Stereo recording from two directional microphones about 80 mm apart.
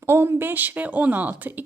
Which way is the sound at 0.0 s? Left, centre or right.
Right.